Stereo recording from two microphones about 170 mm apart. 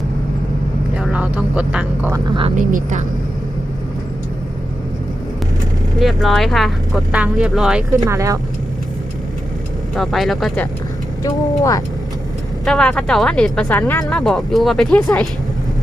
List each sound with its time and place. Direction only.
0.9 s speech: 5° right (ahead or behind)
2.6 s speech: 50° right (ahead or behind)
6.0 s speech: centre (ahead or behind)
7.9 s speech: 20° right (ahead or behind)
9.9 s speech: centre (ahead or behind)
11.2 s speech: 20° left (ahead or behind)
12.6 s speech: 5° left (ahead or behind)